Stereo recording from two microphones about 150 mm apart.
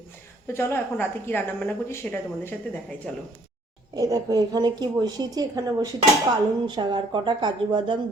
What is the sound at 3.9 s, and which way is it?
A woman's voice, 25° right (ahead or behind).